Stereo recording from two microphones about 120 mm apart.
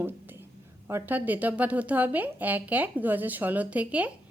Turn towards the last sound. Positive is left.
turn(degrees=-10)  # may be behind; listen again after turning